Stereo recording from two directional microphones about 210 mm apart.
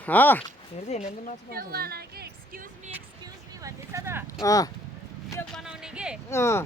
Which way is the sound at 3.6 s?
15° right (ahead or behind).